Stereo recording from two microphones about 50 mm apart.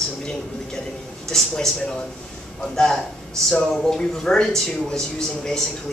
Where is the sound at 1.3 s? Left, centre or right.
Centre.